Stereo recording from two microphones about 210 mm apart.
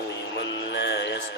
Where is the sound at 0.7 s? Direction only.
55° left (ahead or behind).